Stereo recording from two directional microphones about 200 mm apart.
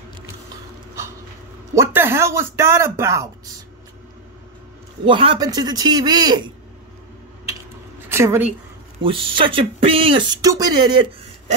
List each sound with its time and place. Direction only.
1.8 s speech: 10° right (ahead or behind)
5.0 s speech: 25° right (ahead or behind)
8.1 s a sound: 10° right (ahead or behind)
9.0 s speech: 25° right (ahead or behind)